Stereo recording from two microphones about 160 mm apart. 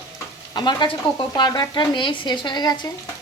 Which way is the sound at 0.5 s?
30° left (ahead or behind).